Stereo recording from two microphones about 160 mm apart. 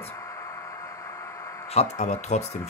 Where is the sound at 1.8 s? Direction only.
45° left (ahead or behind).